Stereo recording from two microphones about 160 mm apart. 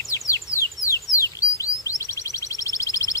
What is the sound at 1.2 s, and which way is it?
Bird, 20° left (ahead or behind).